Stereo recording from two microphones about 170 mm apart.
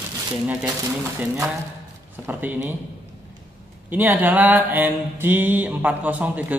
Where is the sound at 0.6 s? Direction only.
15° right (ahead or behind).